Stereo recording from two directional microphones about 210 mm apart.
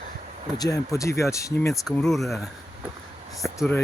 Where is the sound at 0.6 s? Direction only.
15° left (ahead or behind).